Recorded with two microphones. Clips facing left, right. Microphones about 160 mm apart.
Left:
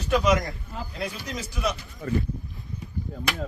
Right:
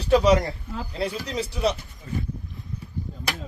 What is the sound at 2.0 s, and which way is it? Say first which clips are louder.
Speech: left 6 dB; 65° left (ahead or behind).